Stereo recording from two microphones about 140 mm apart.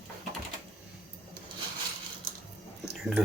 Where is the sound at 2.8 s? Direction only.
5° right (ahead or behind).